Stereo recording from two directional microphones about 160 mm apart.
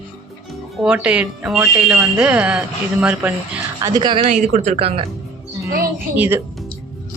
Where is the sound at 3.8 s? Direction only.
30° right (ahead or behind).